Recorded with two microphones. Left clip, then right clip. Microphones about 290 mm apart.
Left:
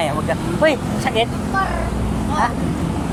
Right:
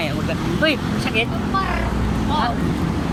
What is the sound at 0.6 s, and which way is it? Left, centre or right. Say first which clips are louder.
Speech: left 3 dB; left.